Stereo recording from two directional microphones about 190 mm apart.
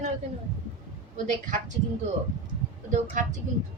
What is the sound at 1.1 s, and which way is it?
Speech, 40° right (ahead or behind).